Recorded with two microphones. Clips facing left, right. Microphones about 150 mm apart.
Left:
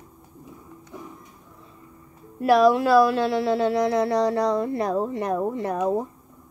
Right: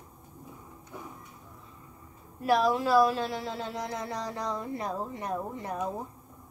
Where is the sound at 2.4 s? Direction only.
70° left (ahead or behind).